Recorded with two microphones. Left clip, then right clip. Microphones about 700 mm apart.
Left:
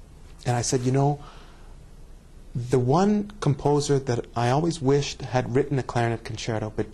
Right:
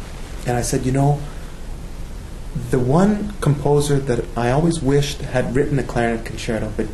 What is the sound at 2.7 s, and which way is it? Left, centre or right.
Speech, left.